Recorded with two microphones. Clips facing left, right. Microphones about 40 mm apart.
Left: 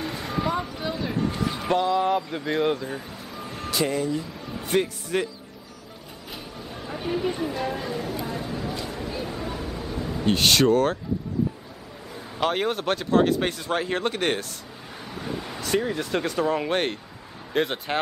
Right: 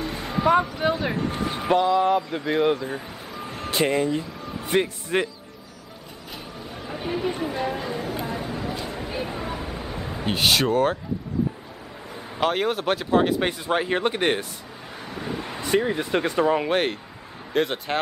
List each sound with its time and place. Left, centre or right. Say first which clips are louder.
0.0 s a sound: right 1 dB; centre
0.8 s speech: right 7 dB; right
1.3 s vehicle: right 1 dB; right
1.6 s speech: right 3 dB; centre
3.7 s speech: right 3 dB; right
4.5 s a sound: right 1 dB; centre
5.1 s speech: right 2 dB; right
6.7 s speech: left 1 dB; centre
8.3 s a sound: right 1 dB; centre
12.4 s speech: right 1 dB; centre
15.0 s a sound: right 1 dB; centre
16.6 s speech: right 2 dB; centre